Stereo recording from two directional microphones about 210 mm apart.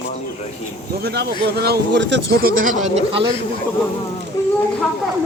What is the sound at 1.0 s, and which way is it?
A man's voice, 50° right (ahead or behind).